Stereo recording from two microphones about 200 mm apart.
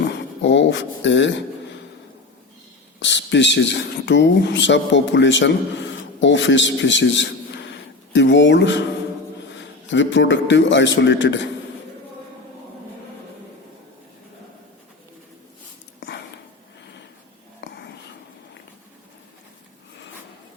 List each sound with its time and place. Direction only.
0.4 s speech: 65° left (ahead or behind)
3.0 s a man's voice: 65° left (ahead or behind)
16.0 s a sound: 65° left (ahead or behind)
17.6 s whispering: 60° left (ahead or behind)